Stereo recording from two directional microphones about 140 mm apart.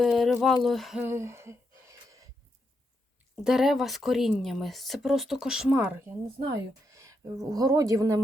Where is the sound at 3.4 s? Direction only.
5° right (ahead or behind).